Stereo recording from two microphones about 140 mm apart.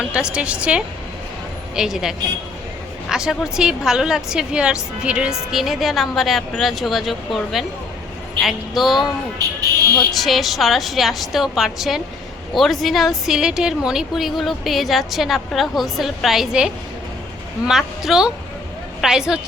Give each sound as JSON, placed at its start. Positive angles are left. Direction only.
{"t": 0.0, "sound": "a woman's voice", "side_deg": -5}
{"t": 9.4, "sound": "speech", "side_deg": -25}
{"t": 10.1, "sound": "a woman's voice", "side_deg": 0}